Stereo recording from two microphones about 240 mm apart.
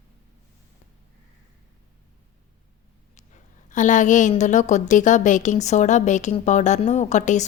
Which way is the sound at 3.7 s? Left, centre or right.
Left.